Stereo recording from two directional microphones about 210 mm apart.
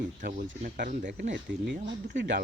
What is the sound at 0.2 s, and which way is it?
Speech, 40° right (ahead or behind).